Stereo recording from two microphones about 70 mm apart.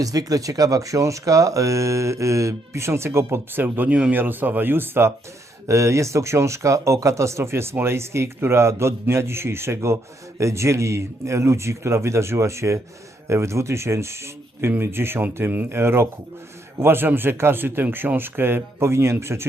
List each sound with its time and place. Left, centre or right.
0.0 s speech: right
5.6 s a man's voice: right